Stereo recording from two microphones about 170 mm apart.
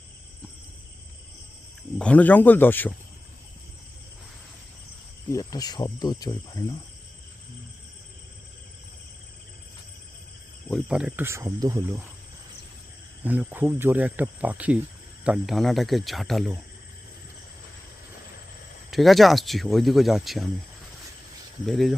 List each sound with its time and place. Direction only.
2.0 s speech: 10° left (ahead or behind)
5.3 s speech: 20° left (ahead or behind)
10.7 s speech: centre (ahead or behind); by 12.0 s 15° right (ahead or behind)
13.2 s speech: 10° right (ahead or behind)
18.9 s speech: centre (ahead or behind)
21.7 s speech: centre (ahead or behind)